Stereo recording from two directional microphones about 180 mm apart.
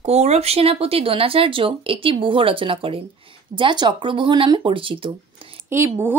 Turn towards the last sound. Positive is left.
turn(degrees=-15)  # may be behind; listen again after turning